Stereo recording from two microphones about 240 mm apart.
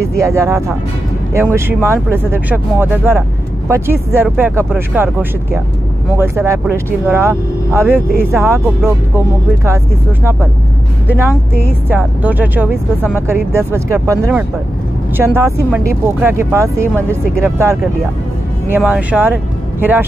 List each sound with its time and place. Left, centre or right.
0.0 s speech: centre
11.1 s speech: centre